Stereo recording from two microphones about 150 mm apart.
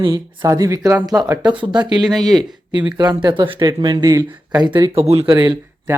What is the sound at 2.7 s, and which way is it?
Speech, 30° right (ahead or behind).